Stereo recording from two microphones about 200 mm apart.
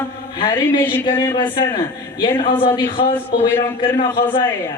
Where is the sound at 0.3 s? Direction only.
20° left (ahead or behind).